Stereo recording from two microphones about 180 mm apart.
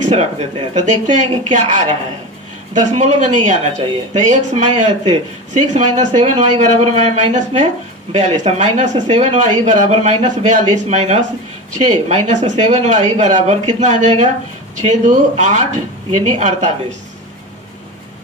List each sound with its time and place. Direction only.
0.0 s a man's voice: 40° right (ahead or behind)
2.7 s a man's voice: 45° right (ahead or behind)